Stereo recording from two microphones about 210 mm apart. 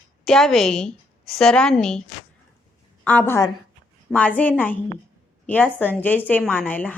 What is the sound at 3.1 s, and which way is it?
A woman's voice, 10° left (ahead or behind).